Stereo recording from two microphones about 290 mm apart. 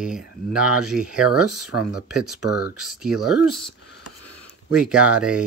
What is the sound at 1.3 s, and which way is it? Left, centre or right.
Speech, right.